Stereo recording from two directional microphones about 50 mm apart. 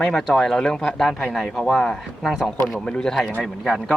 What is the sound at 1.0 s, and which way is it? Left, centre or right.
Speech, centre.